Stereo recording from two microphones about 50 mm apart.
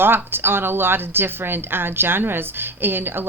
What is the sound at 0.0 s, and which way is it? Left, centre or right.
Speech, right.